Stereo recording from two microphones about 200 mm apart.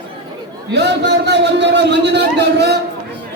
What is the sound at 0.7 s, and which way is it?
A man's voice, 60° right (ahead or behind).